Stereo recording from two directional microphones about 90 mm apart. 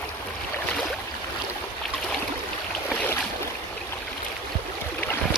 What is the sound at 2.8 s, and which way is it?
Boat, 20° left (ahead or behind).